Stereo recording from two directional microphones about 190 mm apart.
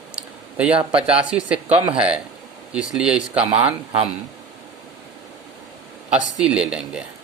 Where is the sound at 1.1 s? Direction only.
5° right (ahead or behind).